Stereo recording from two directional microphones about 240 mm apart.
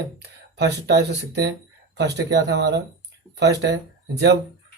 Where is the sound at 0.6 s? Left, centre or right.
Right.